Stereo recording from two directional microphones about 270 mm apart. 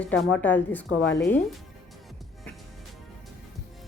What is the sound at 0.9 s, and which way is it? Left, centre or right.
Speech, left.